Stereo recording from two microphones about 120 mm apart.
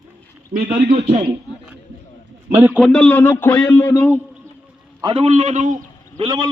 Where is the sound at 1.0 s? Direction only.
60° right (ahead or behind).